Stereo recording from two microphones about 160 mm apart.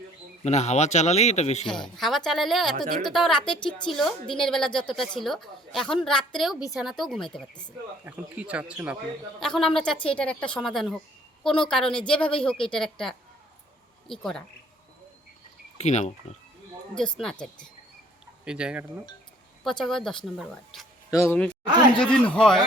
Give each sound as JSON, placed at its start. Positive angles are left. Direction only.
{"t": 0.4, "sound": "speech", "side_deg": 45}
{"t": 1.6, "sound": "a woman's voice", "side_deg": 5}
{"t": 8.0, "sound": "a man's voice", "side_deg": -10}
{"t": 9.4, "sound": "a woman's voice", "side_deg": 5}
{"t": 15.8, "sound": "speech", "side_deg": 45}
{"t": 18.4, "sound": "a man's voice", "side_deg": -5}
{"t": 21.1, "sound": "speech", "side_deg": 20}
{"t": 21.9, "sound": "a woman's voice", "side_deg": 5}